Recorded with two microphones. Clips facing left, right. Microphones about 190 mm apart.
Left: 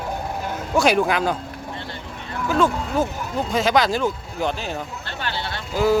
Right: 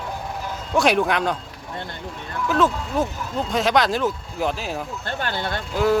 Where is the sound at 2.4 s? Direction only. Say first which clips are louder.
Left 1 dB; centre (ahead or behind).